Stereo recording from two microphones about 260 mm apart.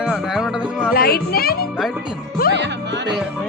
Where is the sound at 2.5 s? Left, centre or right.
Right.